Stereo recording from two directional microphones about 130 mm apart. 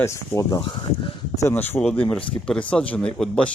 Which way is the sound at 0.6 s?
35° left (ahead or behind).